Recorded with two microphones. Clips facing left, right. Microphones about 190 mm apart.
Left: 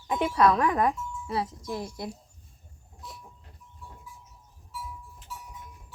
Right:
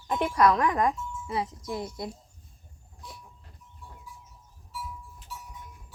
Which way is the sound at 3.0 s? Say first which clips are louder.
Left 1 dB; centre (ahead or behind).